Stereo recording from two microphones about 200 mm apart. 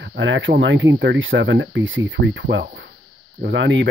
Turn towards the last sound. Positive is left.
turn(degrees=-65)  # may be behind; listen again after turning